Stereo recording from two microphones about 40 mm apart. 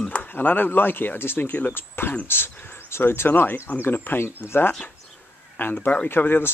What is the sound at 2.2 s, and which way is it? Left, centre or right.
Speech, left.